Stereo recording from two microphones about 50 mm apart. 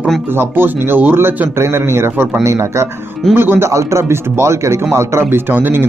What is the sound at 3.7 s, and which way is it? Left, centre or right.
Speech, right.